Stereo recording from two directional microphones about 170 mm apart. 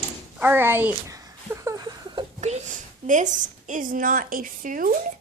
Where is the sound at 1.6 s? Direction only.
25° right (ahead or behind).